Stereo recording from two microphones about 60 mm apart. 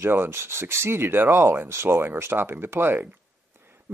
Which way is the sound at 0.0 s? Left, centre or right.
Right.